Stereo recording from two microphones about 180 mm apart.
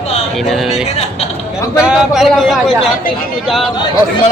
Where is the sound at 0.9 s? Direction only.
35° left (ahead or behind).